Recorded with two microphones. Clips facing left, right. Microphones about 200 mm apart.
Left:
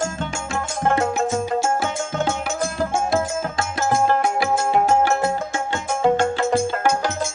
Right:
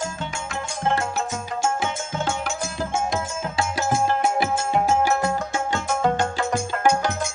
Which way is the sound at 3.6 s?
50° left (ahead or behind).